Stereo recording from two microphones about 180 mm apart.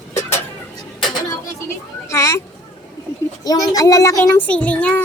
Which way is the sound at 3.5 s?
20° left (ahead or behind).